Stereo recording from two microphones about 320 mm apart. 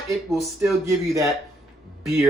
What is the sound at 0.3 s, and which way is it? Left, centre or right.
Speech, centre.